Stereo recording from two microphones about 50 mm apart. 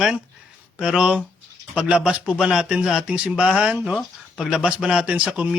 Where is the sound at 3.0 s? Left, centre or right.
Right.